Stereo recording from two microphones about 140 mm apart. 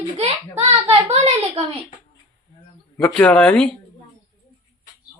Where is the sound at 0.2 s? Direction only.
50° right (ahead or behind).